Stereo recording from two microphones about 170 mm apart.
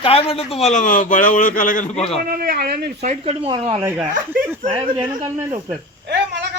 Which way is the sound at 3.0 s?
40° right (ahead or behind).